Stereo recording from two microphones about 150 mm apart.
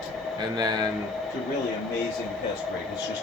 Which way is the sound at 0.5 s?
25° right (ahead or behind).